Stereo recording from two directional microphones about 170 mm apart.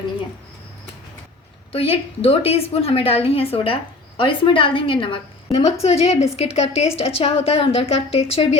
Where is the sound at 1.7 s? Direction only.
35° left (ahead or behind).